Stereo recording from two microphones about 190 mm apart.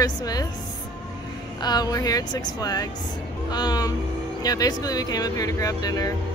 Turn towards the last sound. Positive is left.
turn(degrees=20)  # may be behind; listen again after turning